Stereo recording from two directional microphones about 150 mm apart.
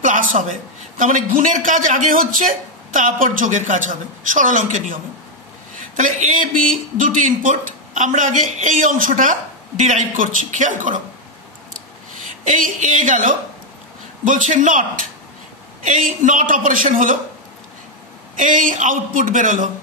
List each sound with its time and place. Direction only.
0.0 s a man's voice: 60° right (ahead or behind)
12.4 s a man's voice: 60° right (ahead or behind)
18.4 s a man's voice: 60° right (ahead or behind)